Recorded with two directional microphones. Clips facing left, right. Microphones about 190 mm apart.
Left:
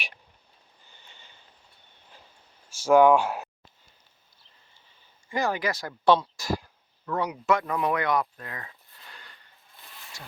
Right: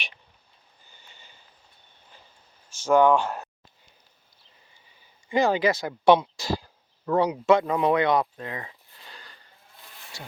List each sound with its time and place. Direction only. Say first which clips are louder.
2.8 s speech: left 1 dB; 5° left (ahead or behind)
5.3 s speech: right 6 dB; 25° right (ahead or behind)
10.1 s speech: right 4 dB; 30° right (ahead or behind)